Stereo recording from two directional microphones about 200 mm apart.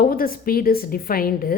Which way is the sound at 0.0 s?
45° left (ahead or behind).